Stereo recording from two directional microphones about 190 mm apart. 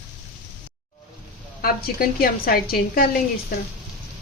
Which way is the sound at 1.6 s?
50° left (ahead or behind).